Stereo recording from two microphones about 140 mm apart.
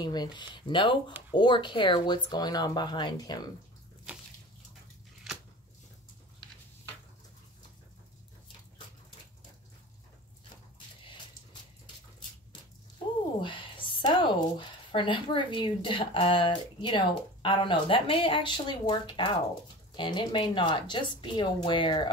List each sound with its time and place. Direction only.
0.0 s speech: 30° left (ahead or behind)
13.4 s speech: 35° left (ahead or behind)